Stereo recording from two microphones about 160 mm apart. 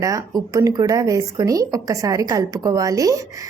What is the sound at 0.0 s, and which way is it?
Speech, 20° right (ahead or behind).